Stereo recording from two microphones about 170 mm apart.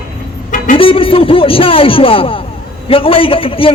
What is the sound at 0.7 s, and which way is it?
A man's voice, 30° left (ahead or behind).